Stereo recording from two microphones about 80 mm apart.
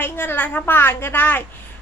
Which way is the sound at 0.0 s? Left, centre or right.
Left.